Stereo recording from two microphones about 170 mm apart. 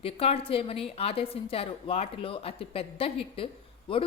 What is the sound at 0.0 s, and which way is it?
A woman's voice, 35° left (ahead or behind).